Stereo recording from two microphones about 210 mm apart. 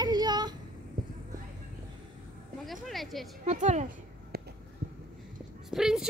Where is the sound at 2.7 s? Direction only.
Centre (ahead or behind).